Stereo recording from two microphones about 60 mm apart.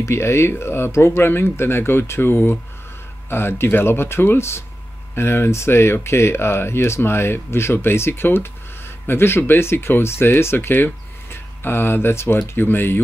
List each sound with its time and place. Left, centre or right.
0.0 s speech: left